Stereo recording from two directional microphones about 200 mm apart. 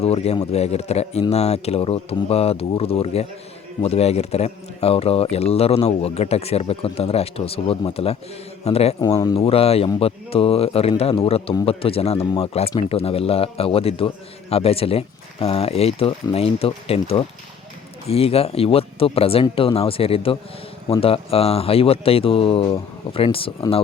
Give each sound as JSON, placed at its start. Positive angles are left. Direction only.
{"t": 0.0, "sound": "a man's voice", "side_deg": 30}
{"t": 9.0, "sound": "speech", "side_deg": 20}
{"t": 9.3, "sound": "speech", "side_deg": 30}